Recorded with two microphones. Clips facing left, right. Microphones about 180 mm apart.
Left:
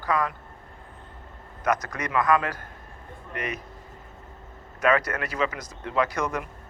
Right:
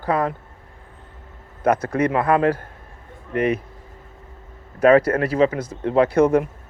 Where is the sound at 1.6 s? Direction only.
30° right (ahead or behind).